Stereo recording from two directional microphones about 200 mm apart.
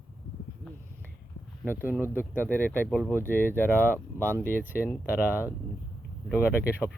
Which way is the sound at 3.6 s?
10° right (ahead or behind).